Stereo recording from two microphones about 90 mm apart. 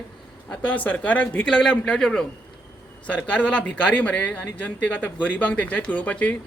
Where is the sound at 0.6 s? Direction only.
15° left (ahead or behind).